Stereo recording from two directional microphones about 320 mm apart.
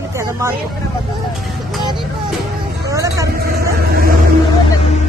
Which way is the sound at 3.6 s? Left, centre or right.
Right.